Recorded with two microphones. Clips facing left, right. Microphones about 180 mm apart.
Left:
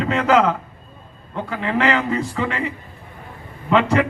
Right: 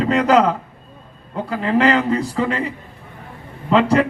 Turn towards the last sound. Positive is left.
turn(degrees=-35)  # may be behind; listen again after turning